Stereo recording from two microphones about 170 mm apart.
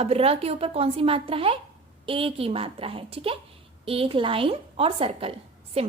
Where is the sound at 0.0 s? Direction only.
35° right (ahead or behind).